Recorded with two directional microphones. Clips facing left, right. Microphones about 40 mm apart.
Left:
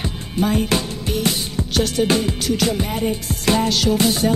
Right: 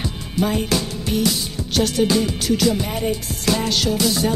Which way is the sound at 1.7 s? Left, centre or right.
Centre.